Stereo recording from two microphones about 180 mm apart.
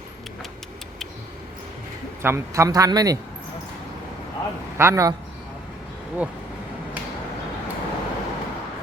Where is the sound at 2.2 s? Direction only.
15° right (ahead or behind).